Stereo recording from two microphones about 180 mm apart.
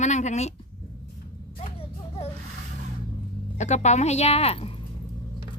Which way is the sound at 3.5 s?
40° left (ahead or behind).